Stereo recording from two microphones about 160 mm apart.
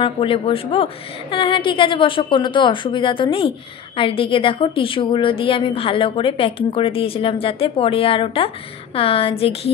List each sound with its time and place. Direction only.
0.0 s a woman's voice: 35° left (ahead or behind)